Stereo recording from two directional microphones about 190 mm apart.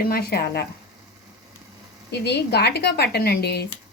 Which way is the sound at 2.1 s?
60° left (ahead or behind).